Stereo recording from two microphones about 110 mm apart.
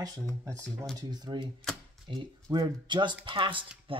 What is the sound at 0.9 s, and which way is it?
Speech, 40° right (ahead or behind).